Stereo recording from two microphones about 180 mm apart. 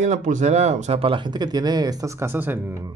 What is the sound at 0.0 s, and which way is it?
Speech, 45° right (ahead or behind).